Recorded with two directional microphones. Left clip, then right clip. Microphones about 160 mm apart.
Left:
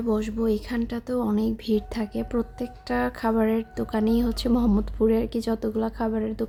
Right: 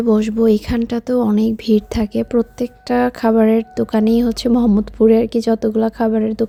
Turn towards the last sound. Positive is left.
turn(degrees=-40)  # may be behind; listen again after turning